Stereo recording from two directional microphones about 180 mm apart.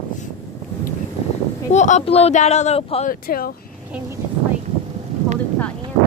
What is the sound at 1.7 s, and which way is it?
Speech, 40° left (ahead or behind).